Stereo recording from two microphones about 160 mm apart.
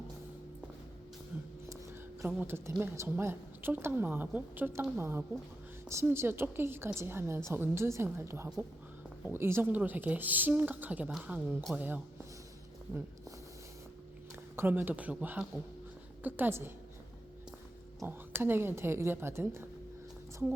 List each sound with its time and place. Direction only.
2.2 s a woman's voice: 15° right (ahead or behind)
14.5 s a woman's voice: 15° right (ahead or behind)
18.0 s a woman's voice: 15° right (ahead or behind)